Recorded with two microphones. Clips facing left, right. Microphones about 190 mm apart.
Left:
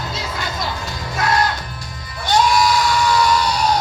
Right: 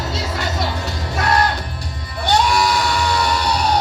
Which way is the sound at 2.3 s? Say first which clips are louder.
Left 1 dB; 65° right (ahead or behind).